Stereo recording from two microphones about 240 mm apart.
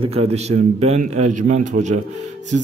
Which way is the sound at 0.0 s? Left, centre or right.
Right.